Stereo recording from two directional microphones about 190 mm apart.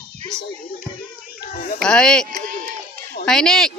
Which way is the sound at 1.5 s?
45° left (ahead or behind).